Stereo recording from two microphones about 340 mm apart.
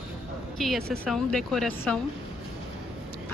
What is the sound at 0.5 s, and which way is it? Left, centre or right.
A woman's voice, centre.